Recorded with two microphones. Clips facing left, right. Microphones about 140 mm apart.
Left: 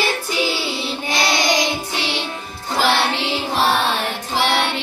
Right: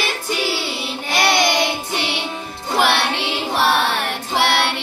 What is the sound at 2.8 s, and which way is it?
Music, 70° right (ahead or behind).